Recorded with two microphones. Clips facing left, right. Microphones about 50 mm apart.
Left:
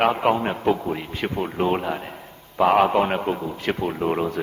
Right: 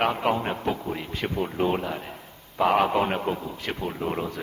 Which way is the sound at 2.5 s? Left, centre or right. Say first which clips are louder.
Left 4 dB; left.